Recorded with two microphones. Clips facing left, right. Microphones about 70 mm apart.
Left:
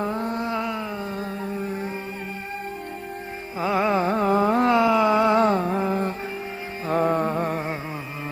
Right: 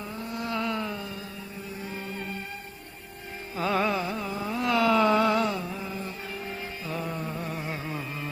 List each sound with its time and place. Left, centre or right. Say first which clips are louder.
0.0 s mantra: left 10 dB; left
0.3 s mantra: left 3 dB; left
0.9 s music: left 8 dB; left
3.6 s carnatic music: left 4 dB; centre
3.9 s carnatic music: left 10 dB; left
4.6 s a sound: left 4 dB; left
5.4 s music: left 9 dB; left